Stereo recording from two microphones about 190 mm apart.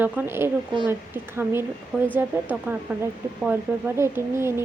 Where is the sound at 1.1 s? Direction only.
10° right (ahead or behind).